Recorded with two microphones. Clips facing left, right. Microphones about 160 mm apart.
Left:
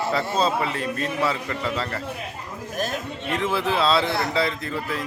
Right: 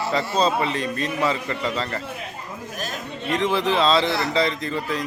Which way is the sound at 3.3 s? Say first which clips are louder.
Right 2 dB; 5° left (ahead or behind).